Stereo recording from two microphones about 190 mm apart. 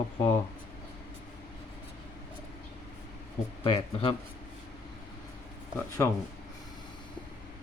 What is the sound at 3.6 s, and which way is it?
Speech, 30° left (ahead or behind).